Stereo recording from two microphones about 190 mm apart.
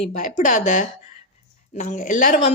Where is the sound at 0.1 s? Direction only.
45° left (ahead or behind).